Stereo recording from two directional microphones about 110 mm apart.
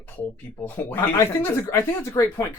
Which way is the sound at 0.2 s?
15° left (ahead or behind).